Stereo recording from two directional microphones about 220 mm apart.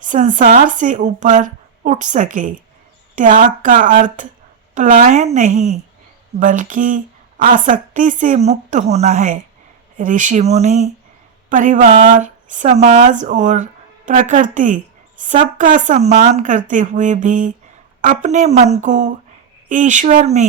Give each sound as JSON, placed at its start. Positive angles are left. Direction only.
{"t": 0.0, "sound": "speech", "side_deg": -35}